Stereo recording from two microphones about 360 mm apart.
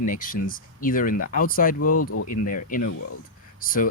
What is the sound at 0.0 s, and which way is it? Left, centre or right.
Speech, left.